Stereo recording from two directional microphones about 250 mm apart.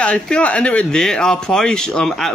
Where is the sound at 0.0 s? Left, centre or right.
Centre.